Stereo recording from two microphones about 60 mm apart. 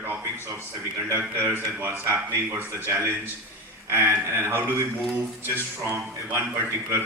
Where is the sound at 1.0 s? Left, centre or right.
Right.